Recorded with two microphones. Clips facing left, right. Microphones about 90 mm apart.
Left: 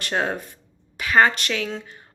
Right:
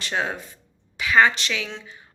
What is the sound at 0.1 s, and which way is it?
A woman's voice, 45° left (ahead or behind).